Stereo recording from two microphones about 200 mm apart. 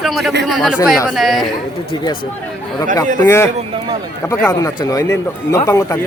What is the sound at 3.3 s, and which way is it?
Speech, 15° left (ahead or behind).